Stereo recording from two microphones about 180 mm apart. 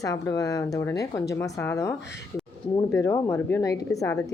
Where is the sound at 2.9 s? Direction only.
15° left (ahead or behind).